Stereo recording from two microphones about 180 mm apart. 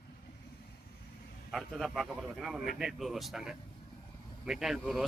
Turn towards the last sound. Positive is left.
turn(degrees=0)  # may be behind; listen again after turning